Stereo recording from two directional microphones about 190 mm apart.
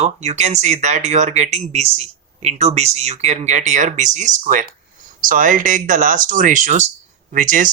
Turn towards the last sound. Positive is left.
turn(degrees=-45)  # may be behind; listen again after turning